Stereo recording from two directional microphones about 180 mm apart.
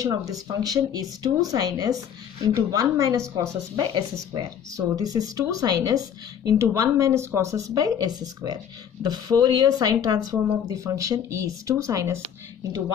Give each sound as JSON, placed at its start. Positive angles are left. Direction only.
{"t": 0.3, "sound": "speech", "side_deg": -20}